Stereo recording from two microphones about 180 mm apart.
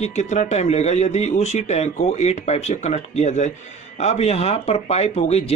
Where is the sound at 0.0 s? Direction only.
40° left (ahead or behind).